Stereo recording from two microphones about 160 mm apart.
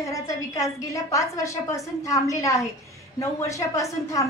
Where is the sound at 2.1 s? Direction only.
20° left (ahead or behind).